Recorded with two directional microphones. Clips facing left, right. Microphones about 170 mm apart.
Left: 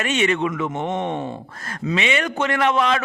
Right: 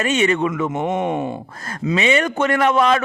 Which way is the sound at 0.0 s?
40° right (ahead or behind).